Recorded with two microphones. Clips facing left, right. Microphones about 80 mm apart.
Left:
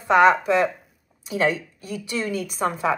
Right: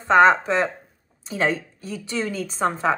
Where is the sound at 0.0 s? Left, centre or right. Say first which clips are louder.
Right 1 dB; right.